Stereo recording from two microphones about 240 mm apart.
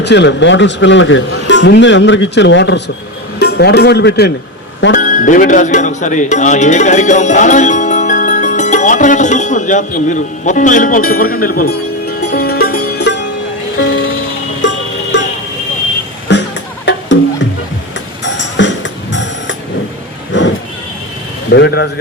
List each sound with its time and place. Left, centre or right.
0.0 s a man's voice: left
13.7 s music: left
15.1 s a sound: left
16.3 s music: left
18.3 s music: left
20.3 s vehicle: left
21.5 s a man's voice: left